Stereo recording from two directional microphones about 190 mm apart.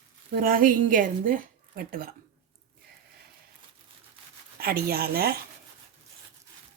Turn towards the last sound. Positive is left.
turn(degrees=-55)  # may be behind; listen again after turning